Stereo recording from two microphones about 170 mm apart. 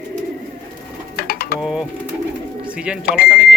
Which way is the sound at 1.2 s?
60° left (ahead or behind).